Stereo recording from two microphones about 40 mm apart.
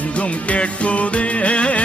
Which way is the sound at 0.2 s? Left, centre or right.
Left.